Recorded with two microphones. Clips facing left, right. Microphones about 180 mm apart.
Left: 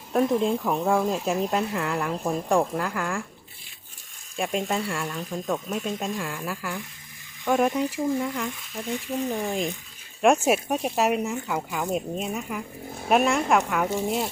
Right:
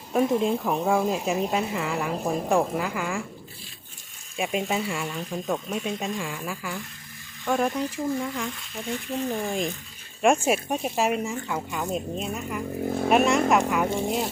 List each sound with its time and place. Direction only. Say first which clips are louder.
0.1 s speech: even; 5° right (ahead or behind)
4.4 s speech: even; 5° right (ahead or behind)